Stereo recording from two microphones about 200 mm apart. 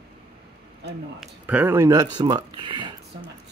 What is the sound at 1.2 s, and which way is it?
Speech, 5° right (ahead or behind).